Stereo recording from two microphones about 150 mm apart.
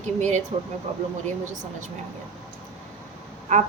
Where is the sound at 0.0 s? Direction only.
50° right (ahead or behind).